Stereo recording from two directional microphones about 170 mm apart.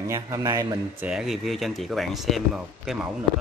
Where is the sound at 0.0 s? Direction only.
20° right (ahead or behind).